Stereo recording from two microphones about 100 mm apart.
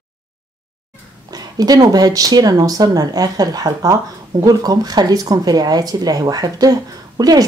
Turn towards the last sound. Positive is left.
turn(degrees=-40)  # may be behind; listen again after turning